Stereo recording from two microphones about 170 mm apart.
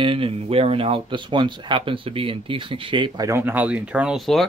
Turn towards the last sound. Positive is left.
turn(degrees=0)  # may be behind; listen again after turning